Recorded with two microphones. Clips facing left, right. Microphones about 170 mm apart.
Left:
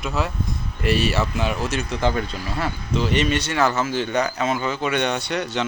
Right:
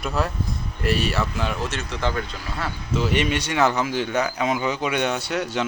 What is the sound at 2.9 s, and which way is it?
Speech, 5° right (ahead or behind).